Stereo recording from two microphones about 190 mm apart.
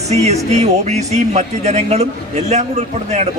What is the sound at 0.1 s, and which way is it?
A man's voice, 35° right (ahead or behind).